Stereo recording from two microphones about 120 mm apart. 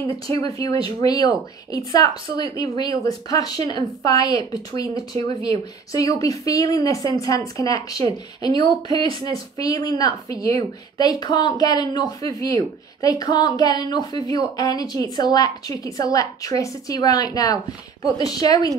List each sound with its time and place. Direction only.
0.3 s speech: 30° left (ahead or behind)